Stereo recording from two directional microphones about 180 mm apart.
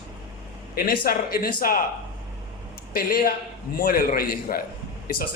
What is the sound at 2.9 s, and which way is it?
A man's voice, 55° left (ahead or behind).